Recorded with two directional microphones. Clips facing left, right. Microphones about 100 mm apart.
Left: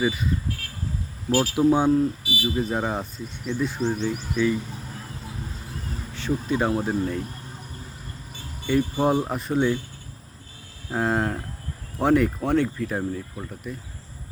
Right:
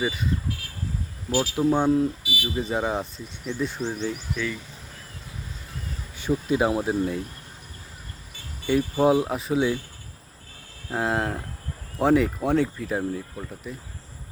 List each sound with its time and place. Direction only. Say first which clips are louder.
0.0 s speech: left 3 dB; centre (ahead or behind)
1.3 s speech: left 3 dB; 45° left (ahead or behind)
1.5 s speech: left 2 dB; 10° left (ahead or behind)
2.2 s speech: left 3 dB; 35° left (ahead or behind)
2.6 s speech: right 2 dB; centre (ahead or behind)
4.4 s speech: left 9 dB; 15° left (ahead or behind)
6.1 s speech: right 2 dB; 10° right (ahead or behind)
8.6 s speech: right 1 dB; 5° right (ahead or behind)
10.8 s speech: left 1 dB; centre (ahead or behind)